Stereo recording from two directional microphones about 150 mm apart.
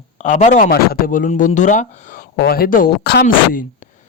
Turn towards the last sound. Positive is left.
turn(degrees=65)  # may be behind; listen again after turning